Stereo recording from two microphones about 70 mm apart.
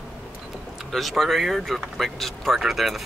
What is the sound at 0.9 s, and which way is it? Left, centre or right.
Speech, centre.